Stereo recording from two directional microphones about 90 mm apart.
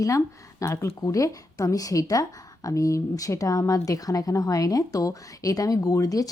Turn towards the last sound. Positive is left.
turn(degrees=40)  # may be behind; listen again after turning